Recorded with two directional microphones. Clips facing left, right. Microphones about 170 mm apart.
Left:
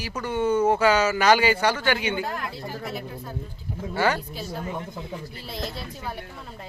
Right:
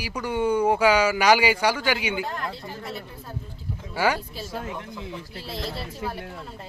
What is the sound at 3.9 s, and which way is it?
Speech, 10° right (ahead or behind).